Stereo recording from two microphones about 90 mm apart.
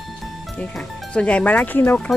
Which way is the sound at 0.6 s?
10° left (ahead or behind).